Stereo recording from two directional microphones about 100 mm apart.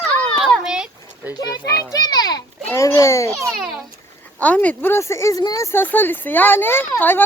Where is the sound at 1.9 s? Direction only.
40° left (ahead or behind).